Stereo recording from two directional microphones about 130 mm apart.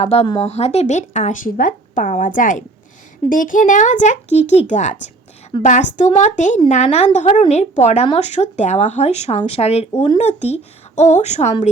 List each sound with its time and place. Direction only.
0.0 s speech: 50° left (ahead or behind); by 6.6 s 70° left (ahead or behind)
6.8 s speech: 55° left (ahead or behind)